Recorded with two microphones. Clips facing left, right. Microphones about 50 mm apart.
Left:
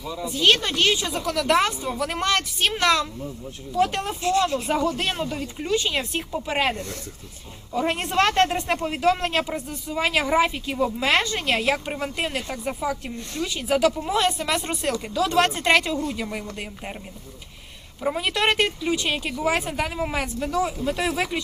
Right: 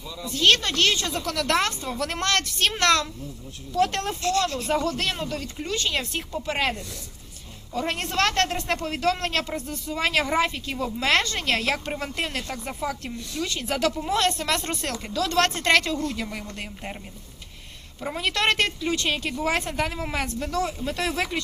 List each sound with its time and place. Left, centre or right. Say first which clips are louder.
0.1 s speech: left 5 dB; left
0.3 s a man's voice: even; centre
6.7 s speech: left 5 dB; left
7.7 s a man's voice: left 3 dB; centre
18.0 s a man's voice: left 2 dB; centre